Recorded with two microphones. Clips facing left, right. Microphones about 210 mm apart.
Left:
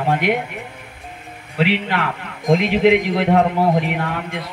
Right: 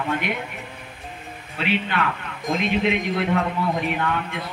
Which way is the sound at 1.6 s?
80° left.